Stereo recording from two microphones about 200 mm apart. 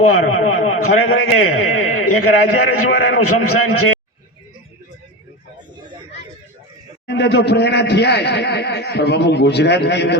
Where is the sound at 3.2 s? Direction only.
90° left.